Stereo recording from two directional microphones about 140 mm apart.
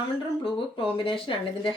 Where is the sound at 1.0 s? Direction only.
40° left (ahead or behind).